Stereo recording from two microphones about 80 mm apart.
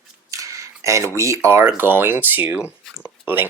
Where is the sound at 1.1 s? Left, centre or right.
Right.